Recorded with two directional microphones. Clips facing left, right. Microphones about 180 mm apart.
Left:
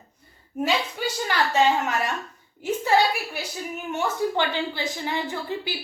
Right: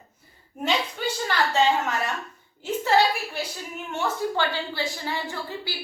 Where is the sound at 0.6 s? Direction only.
10° left (ahead or behind).